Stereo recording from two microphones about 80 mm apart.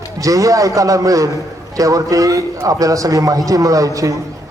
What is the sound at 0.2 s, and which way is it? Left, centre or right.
Speech, right.